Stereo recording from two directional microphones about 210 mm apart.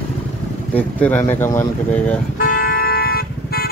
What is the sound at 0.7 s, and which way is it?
Speech, 10° left (ahead or behind).